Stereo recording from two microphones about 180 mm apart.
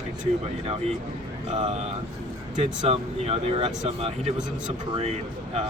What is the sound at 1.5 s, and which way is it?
Speech, 40° right (ahead or behind).